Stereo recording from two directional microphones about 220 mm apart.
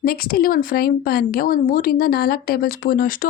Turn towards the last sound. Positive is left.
turn(degrees=40)  # may be behind; listen again after turning